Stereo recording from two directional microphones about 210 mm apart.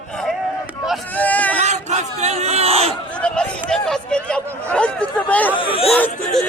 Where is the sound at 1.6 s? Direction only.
35° right (ahead or behind).